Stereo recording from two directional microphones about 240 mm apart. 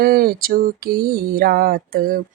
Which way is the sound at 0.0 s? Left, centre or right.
Right.